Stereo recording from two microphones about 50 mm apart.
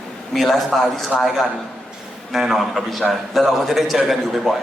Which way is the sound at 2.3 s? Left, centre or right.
Centre.